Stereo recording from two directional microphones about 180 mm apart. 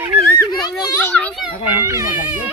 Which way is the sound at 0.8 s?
20° left (ahead or behind).